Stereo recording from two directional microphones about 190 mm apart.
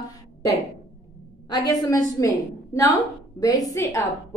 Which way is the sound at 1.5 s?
20° left (ahead or behind).